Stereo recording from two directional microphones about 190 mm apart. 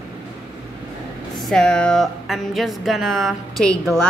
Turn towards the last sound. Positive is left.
turn(degrees=0)  # may be behind; listen again after turning